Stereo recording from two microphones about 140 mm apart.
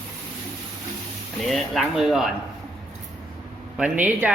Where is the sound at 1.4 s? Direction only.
Centre (ahead or behind).